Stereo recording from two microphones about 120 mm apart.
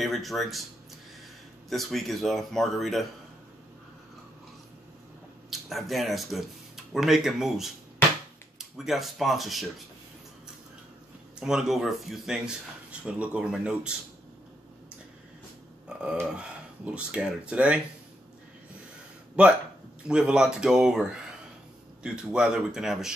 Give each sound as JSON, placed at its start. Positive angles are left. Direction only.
{"t": 0.0, "sound": "speech", "side_deg": 0}
{"t": 1.7, "sound": "speech", "side_deg": 0}
{"t": 5.5, "sound": "speech", "side_deg": 0}
{"t": 11.3, "sound": "speech", "side_deg": -5}
{"t": 16.0, "sound": "speech", "side_deg": -10}
{"t": 19.4, "sound": "speech", "side_deg": -10}
{"t": 22.0, "sound": "speech", "side_deg": -5}